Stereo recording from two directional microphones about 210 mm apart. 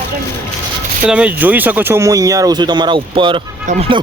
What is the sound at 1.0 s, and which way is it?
Speech, 5° right (ahead or behind).